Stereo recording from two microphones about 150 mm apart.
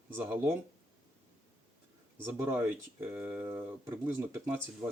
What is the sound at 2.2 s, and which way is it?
Speech, 15° right (ahead or behind).